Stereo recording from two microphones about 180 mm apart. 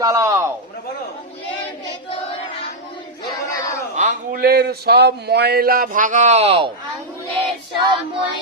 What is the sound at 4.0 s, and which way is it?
Speech, 50° right (ahead or behind).